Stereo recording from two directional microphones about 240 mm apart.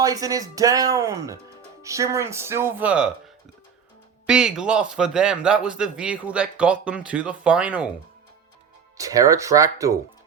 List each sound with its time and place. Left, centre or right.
0.0 s speech: centre
4.3 s a man's voice: centre
9.0 s speech: centre